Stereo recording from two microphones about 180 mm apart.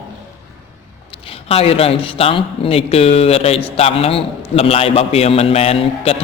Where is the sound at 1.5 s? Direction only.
35° left (ahead or behind).